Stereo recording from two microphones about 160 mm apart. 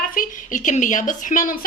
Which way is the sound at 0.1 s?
55° left (ahead or behind).